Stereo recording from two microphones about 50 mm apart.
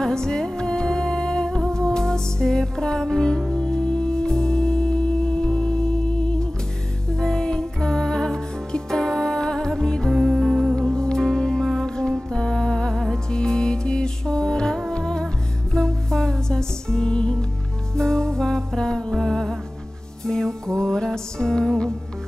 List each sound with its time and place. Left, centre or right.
0.0 s music: centre
10.8 s music: centre